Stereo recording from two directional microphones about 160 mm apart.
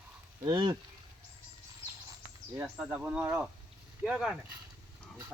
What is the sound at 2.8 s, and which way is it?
Speech, 10° right (ahead or behind).